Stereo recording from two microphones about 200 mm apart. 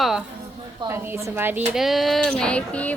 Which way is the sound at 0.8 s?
10° right (ahead or behind).